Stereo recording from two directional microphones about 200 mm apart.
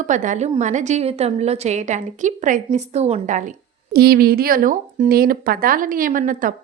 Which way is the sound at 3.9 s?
50° right (ahead or behind).